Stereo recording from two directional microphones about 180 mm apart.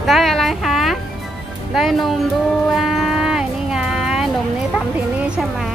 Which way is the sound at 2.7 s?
Centre (ahead or behind).